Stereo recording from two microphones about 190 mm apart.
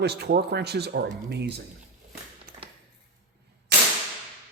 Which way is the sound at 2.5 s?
50° right (ahead or behind).